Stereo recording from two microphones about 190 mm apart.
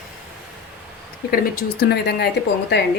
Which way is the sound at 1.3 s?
55° left (ahead or behind).